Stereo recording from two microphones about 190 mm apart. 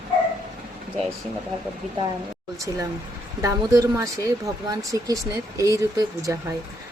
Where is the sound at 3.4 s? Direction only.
15° right (ahead or behind).